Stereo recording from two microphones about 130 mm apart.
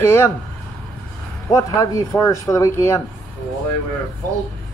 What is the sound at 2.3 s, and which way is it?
Speech, 25° left (ahead or behind).